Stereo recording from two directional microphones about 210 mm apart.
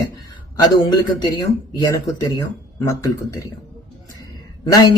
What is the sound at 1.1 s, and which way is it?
Speech, 20° left (ahead or behind).